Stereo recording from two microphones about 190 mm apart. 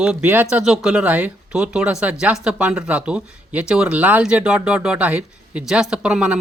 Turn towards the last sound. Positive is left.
turn(degrees=-5)  # may be behind; listen again after turning